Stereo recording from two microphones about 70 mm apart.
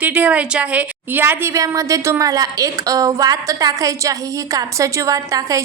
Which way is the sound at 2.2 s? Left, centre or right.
Right.